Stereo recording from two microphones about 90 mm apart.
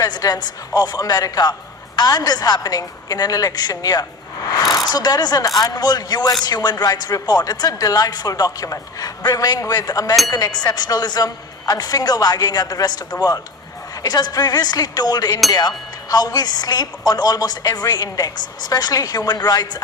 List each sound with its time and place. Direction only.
0.0 s speech: 45° left (ahead or behind)
4.4 s a sound: 45° left (ahead or behind)
4.9 s speech: 45° left (ahead or behind)